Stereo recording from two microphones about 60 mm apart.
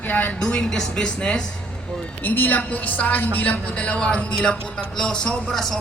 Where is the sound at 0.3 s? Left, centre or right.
Centre.